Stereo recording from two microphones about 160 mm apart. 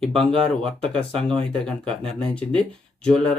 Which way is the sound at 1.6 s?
5° left (ahead or behind).